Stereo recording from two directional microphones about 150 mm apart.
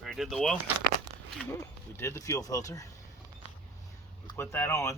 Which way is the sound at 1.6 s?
15° left (ahead or behind).